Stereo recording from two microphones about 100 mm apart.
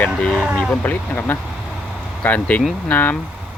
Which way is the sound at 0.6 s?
10° left (ahead or behind).